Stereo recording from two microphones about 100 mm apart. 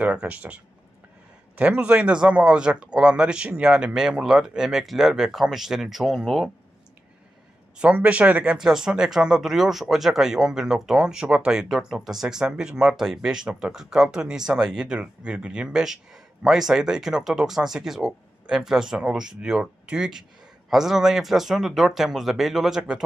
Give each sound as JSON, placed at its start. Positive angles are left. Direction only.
{"t": 0.0, "sound": "speech", "side_deg": -10}
{"t": 1.6, "sound": "speech", "side_deg": -10}
{"t": 7.8, "sound": "speech", "side_deg": -10}